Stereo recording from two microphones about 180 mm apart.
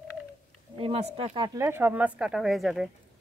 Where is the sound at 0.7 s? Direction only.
30° right (ahead or behind).